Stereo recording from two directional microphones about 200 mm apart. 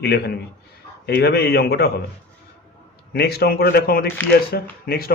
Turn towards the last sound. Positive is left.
turn(degrees=50)  # may be behind; listen again after turning